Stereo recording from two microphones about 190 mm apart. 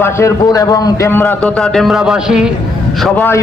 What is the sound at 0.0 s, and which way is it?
A man's voice, 15° left (ahead or behind).